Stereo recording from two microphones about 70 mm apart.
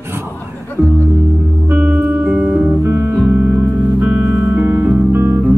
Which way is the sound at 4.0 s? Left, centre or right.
Centre.